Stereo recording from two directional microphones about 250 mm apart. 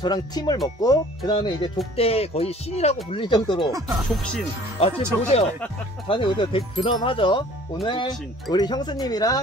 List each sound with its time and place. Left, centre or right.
0.0 s speech: centre
3.9 s speech: centre
4.7 s speech: left
6.0 s speech: centre